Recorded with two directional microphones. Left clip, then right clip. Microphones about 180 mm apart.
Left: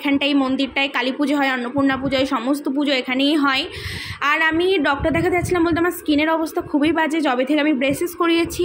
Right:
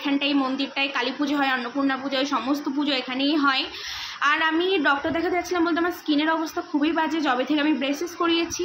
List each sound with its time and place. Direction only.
0.0 s a woman's voice: 35° left (ahead or behind)